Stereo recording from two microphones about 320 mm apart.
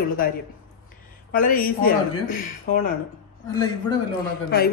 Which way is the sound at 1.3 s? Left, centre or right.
Left.